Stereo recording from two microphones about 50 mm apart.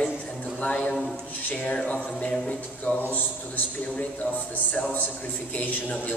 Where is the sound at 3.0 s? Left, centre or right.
Left.